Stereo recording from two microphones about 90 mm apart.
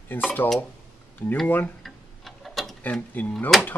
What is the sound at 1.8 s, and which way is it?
Clock, centre (ahead or behind).